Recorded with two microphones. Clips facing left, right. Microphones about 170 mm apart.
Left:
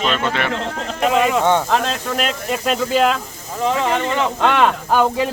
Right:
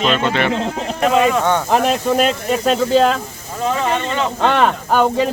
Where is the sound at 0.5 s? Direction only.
10° right (ahead or behind).